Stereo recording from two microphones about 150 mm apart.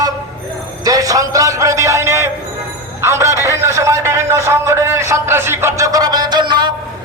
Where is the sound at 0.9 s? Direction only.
25° right (ahead or behind).